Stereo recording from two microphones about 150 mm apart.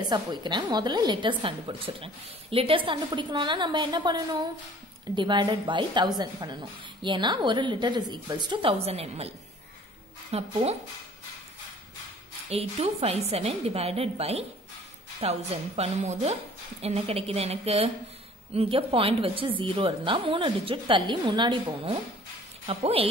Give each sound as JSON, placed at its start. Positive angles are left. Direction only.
{"t": 0.1, "sound": "a woman's voice", "side_deg": -30}
{"t": 10.3, "sound": "a woman's voice", "side_deg": -45}
{"t": 12.4, "sound": "a woman's voice", "side_deg": -40}